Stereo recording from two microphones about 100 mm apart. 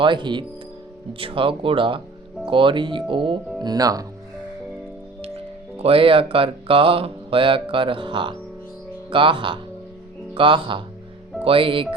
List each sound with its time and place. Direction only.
0.0 s speech: 50° right (ahead or behind)
1.2 s speech: 60° right (ahead or behind)
3.6 s speech: 40° right (ahead or behind)
5.7 s speech: 75° right (ahead or behind)